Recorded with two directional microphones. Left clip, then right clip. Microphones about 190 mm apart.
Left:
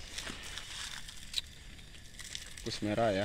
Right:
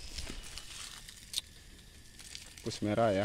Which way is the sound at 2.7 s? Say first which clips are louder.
Right 1 dB; 50° right (ahead or behind).